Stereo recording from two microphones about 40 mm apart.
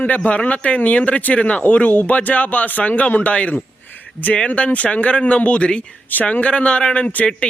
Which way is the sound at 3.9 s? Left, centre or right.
Left.